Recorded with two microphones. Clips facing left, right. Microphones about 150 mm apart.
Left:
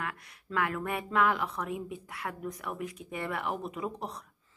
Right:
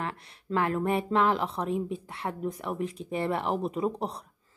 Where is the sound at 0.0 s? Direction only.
30° right (ahead or behind).